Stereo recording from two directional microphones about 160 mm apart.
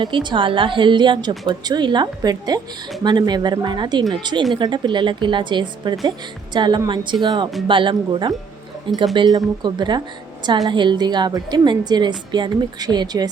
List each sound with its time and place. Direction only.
0.0 s a woman's voice: 30° right (ahead or behind)